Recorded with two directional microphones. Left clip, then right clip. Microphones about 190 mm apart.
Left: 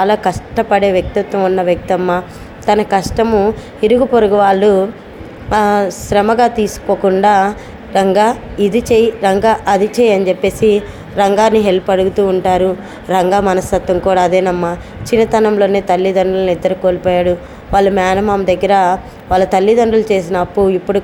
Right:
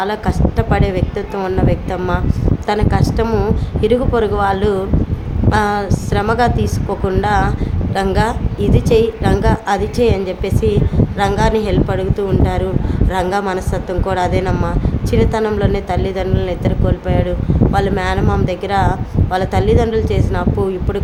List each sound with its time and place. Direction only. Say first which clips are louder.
0.0 s a woman's voice: left 6 dB; 20° left (ahead or behind)